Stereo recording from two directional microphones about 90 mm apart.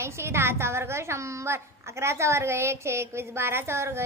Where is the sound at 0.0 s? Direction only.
30° right (ahead or behind).